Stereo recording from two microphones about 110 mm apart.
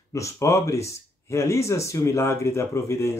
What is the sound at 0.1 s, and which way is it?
Speech, 30° left (ahead or behind).